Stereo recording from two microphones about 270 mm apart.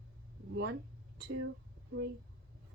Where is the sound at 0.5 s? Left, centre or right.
Right.